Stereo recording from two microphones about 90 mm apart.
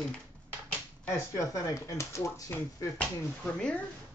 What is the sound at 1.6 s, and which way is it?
Speech, 35° left (ahead or behind).